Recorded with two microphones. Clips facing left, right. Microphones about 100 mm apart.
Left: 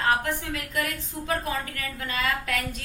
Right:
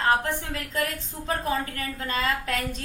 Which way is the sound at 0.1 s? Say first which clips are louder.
Right 1 dB; 30° right (ahead or behind).